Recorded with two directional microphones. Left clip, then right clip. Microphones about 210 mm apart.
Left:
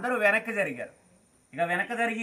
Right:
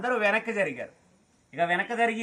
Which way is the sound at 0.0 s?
10° right (ahead or behind).